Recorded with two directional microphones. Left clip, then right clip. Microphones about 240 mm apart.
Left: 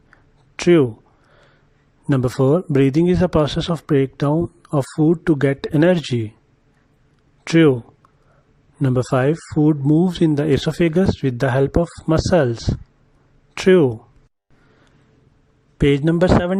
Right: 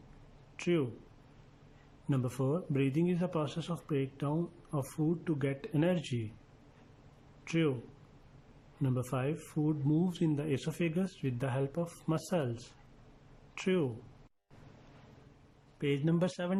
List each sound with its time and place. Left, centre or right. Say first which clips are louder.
0.5 s speech: left 19 dB; left
2.0 s speech: left 18 dB; left
7.4 s speech: left 19 dB; left
8.8 s speech: left 18 dB; left
15.8 s speech: left 17 dB; left